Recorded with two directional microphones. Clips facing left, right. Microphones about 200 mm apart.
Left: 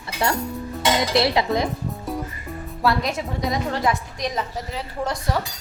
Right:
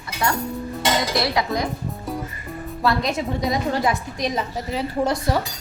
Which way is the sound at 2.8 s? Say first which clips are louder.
Right 1 dB; 5° left (ahead or behind).